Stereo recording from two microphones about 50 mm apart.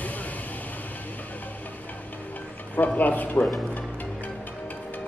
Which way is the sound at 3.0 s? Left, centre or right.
Left.